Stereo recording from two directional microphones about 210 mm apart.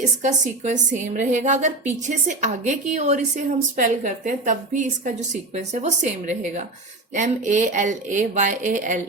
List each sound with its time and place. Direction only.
0.2 s a woman's voice: 35° right (ahead or behind)